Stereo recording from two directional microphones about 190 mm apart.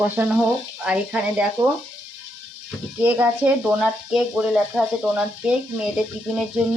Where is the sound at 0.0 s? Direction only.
10° right (ahead or behind).